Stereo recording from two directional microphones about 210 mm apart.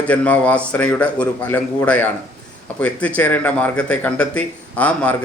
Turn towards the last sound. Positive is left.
turn(degrees=5)  # may be behind; listen again after turning